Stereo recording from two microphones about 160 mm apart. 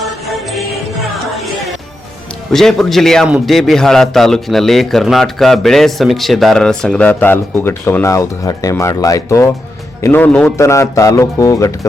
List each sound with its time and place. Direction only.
0.0 s music: centre (ahead or behind)
2.5 s a man's voice: centre (ahead or behind); by 11.9 s 20° left (ahead or behind)